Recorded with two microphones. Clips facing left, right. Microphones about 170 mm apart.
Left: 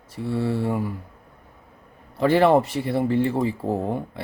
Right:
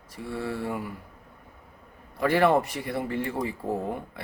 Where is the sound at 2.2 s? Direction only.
25° left (ahead or behind).